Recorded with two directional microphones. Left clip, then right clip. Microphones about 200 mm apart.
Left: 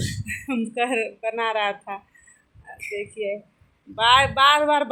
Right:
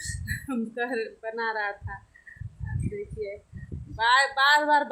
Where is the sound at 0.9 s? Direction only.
20° left (ahead or behind).